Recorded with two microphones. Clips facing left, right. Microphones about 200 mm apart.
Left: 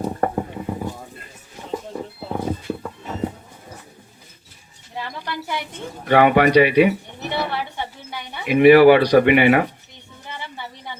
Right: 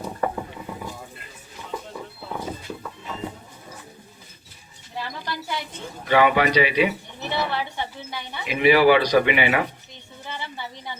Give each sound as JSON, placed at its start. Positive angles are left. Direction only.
{"t": 0.0, "sound": "mechanisms", "side_deg": 50}
{"t": 2.4, "sound": "dog", "side_deg": 50}
{"t": 6.1, "sound": "speech", "side_deg": 55}